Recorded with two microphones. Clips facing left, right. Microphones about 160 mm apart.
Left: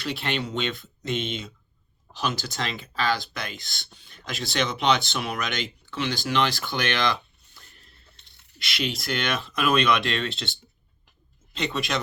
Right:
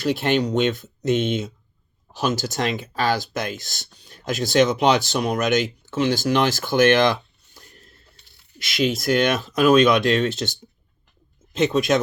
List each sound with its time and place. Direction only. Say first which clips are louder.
0.0 s speech: right 9 dB; 50° right (ahead or behind)
8.5 s speech: right 8 dB; 45° right (ahead or behind)